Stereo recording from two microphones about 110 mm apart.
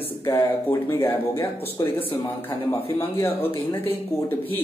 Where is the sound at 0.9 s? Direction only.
25° left (ahead or behind).